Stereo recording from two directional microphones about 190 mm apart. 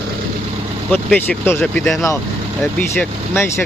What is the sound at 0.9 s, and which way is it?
Speech, 5° left (ahead or behind).